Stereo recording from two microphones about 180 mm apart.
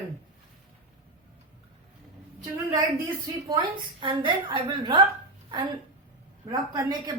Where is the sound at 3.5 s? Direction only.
25° right (ahead or behind).